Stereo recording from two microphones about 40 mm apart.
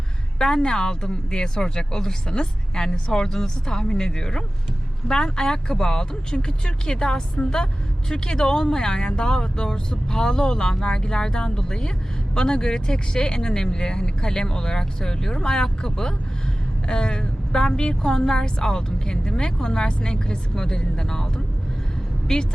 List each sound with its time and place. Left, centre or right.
0.3 s speech: centre